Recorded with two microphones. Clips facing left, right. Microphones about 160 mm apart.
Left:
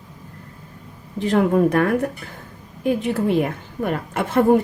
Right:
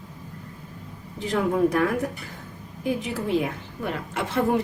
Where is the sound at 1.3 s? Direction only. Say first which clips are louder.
Left 5 dB; 60° left (ahead or behind).